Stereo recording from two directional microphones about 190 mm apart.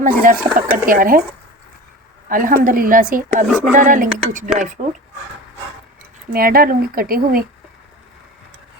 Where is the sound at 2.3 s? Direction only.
45° right (ahead or behind).